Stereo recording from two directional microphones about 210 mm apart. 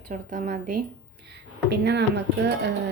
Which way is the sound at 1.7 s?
55° right (ahead or behind).